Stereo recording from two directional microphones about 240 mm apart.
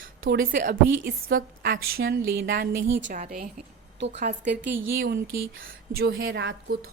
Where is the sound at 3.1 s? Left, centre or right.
Right.